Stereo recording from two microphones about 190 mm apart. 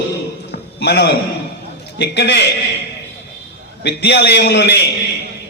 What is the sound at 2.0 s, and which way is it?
Speech, 65° left (ahead or behind).